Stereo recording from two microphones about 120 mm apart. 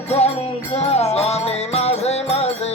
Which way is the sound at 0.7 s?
60° left (ahead or behind).